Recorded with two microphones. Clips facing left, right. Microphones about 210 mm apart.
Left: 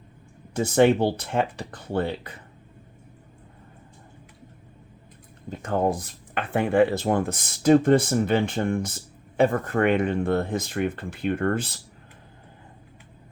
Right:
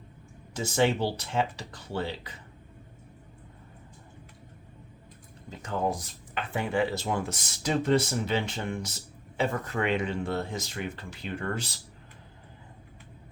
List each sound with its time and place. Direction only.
0.5 s speech: 55° left (ahead or behind)
5.5 s speech: 55° left (ahead or behind)